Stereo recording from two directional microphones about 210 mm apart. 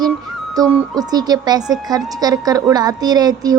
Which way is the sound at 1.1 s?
20° right (ahead or behind).